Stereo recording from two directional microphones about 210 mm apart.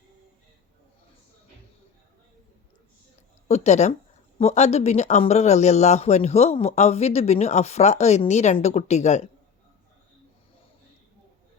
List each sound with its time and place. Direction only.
3.5 s speech: 30° left (ahead or behind)